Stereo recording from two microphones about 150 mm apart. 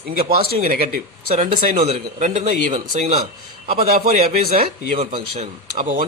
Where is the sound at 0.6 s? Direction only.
70° right (ahead or behind).